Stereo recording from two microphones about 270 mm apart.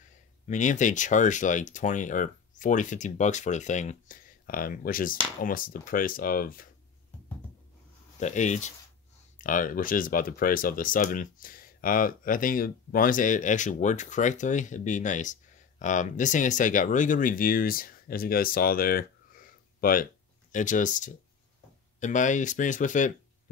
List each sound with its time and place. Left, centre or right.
0.5 s speech: left
8.2 s speech: left